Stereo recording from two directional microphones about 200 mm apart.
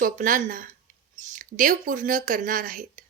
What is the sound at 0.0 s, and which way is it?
Speech, 40° right (ahead or behind).